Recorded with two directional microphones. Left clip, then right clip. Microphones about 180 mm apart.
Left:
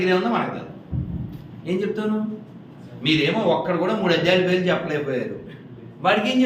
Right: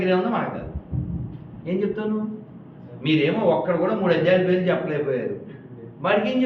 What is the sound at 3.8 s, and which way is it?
A man's voice, centre (ahead or behind).